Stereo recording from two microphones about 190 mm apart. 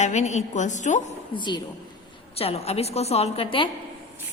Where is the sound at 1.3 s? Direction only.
25° left (ahead or behind).